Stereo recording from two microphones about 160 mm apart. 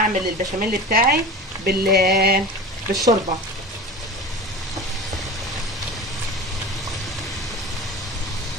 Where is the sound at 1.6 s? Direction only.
85° right.